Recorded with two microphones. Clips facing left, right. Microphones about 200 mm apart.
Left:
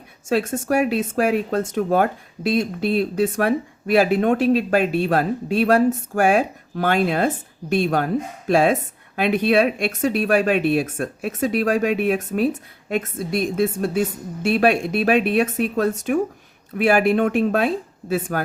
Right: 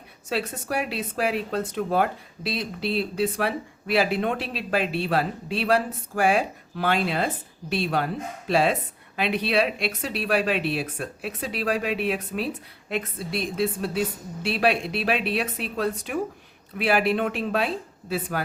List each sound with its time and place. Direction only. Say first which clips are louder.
0.3 s speech: left 8 dB; 45° left (ahead or behind)